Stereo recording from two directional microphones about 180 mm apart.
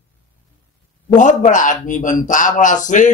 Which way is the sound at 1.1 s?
45° left (ahead or behind).